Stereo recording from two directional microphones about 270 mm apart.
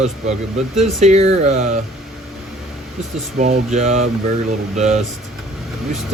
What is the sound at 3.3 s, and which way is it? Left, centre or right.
Speech, right.